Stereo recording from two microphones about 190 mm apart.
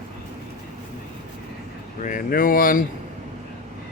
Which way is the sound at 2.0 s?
45° left (ahead or behind).